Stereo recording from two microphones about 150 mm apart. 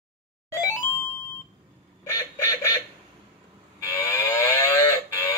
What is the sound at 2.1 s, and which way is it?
Fowl, 20° left (ahead or behind).